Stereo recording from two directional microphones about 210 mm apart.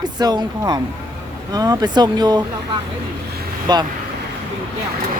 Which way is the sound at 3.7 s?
20° right (ahead or behind).